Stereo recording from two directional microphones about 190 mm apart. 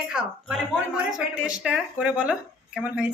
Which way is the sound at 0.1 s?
5° right (ahead or behind).